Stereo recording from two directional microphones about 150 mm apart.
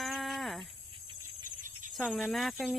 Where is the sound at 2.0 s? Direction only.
5° left (ahead or behind).